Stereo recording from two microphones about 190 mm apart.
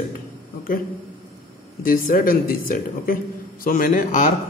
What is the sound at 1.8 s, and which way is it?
Speech, 50° left (ahead or behind).